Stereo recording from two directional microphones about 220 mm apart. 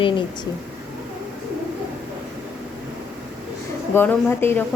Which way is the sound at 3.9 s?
10° left (ahead or behind).